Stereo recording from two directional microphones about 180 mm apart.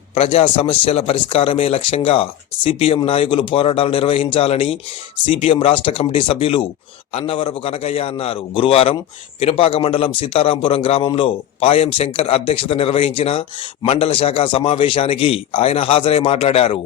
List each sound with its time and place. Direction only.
0.1 s speech: 35° left (ahead or behind)